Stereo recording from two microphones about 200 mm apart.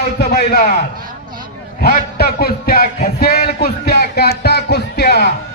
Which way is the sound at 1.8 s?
50° left (ahead or behind).